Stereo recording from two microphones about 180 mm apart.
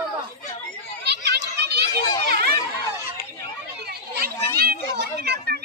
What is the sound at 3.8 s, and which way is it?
Chatter, 60° right (ahead or behind).